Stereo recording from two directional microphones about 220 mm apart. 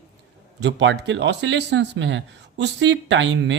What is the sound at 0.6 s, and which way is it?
Speech, 55° right (ahead or behind).